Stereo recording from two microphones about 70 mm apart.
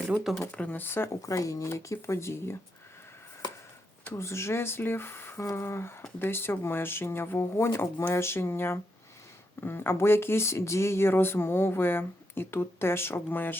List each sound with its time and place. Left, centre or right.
0.5 s speech: centre
0.8 s speech: left
1.2 s speech: left
4.0 s speech: left